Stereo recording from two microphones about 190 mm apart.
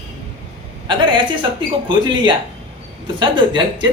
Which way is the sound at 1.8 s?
25° right (ahead or behind).